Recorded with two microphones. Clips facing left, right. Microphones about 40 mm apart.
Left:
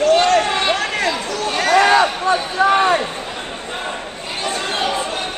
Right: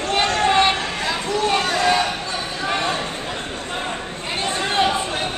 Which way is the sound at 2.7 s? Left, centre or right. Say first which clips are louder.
Left 7 dB; left.